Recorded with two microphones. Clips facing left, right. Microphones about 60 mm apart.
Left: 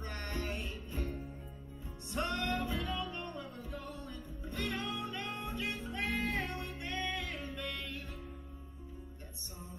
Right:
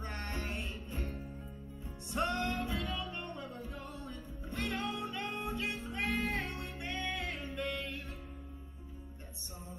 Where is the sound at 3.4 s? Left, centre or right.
Right.